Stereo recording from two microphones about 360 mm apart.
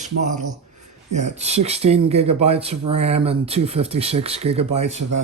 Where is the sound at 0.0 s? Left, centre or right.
Centre.